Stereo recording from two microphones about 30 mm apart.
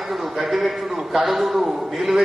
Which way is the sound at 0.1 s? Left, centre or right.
Centre.